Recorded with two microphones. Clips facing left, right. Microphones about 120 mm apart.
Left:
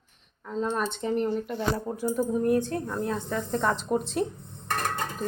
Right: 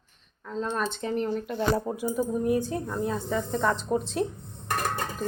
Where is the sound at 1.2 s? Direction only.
Centre (ahead or behind).